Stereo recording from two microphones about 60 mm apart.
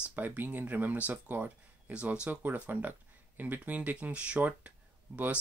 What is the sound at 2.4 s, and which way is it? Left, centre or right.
Speech, right.